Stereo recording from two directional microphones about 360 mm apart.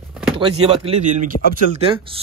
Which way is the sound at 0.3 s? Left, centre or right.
Centre.